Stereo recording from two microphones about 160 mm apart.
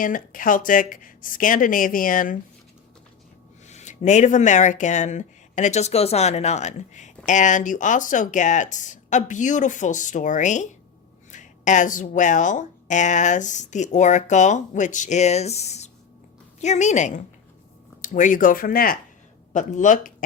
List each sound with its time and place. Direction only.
0.0 s speech: 55° left (ahead or behind)
3.7 s speech: 45° left (ahead or behind)
11.3 s a sound: 50° left (ahead or behind)
12.1 s speech: 50° left (ahead or behind)
19.5 s speech: 50° left (ahead or behind)